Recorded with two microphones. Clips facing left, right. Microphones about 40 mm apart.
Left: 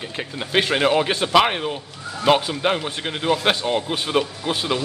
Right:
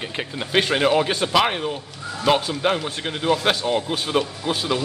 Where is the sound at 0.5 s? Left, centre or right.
Centre.